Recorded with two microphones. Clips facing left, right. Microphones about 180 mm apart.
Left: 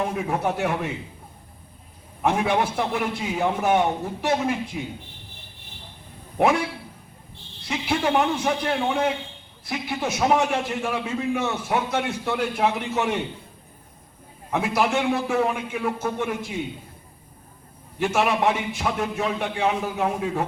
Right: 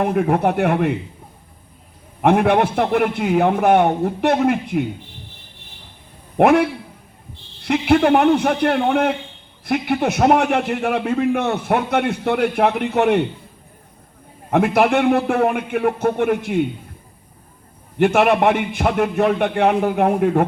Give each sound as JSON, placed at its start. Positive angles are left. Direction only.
{"t": 0.0, "sound": "a man's voice", "side_deg": -60}
{"t": 2.2, "sound": "a man's voice", "side_deg": -60}
{"t": 6.3, "sound": "a man's voice", "side_deg": -60}
{"t": 14.5, "sound": "a man's voice", "side_deg": -60}
{"t": 17.9, "sound": "a man's voice", "side_deg": -60}